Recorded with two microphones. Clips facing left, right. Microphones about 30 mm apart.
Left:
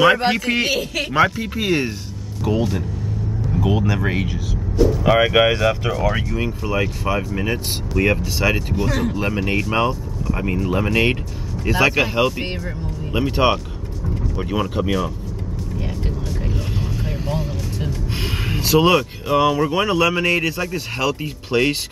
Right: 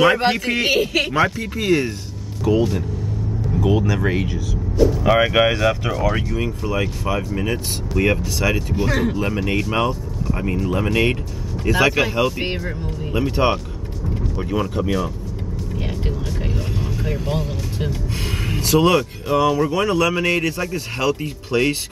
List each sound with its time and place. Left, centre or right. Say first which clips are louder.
0.2 s speech: even; centre
0.7 s speech: right 4 dB; centre
1.1 s speech: left 2 dB; centre
2.5 s speech: right 3 dB; centre
8.4 s speech: left 1 dB; centre
8.8 s speech: right 2 dB; centre
9.6 s speech: left 1 dB; centre
16.0 s vehicle: right 1 dB; centre
16.5 s vehicle: even; centre
18.1 s speech: left 1 dB; centre
20.2 s speech: left 1 dB; centre